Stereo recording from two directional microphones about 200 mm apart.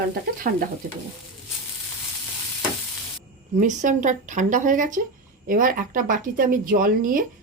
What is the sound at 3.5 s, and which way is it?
Speech, 40° right (ahead or behind).